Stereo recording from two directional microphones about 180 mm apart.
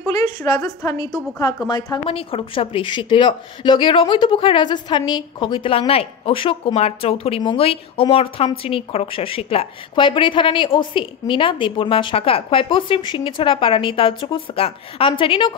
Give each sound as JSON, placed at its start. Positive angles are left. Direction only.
{"t": 0.5, "sound": "a woman's voice", "side_deg": 20}